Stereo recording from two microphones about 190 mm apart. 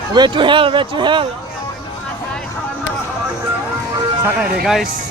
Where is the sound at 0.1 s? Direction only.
25° right (ahead or behind).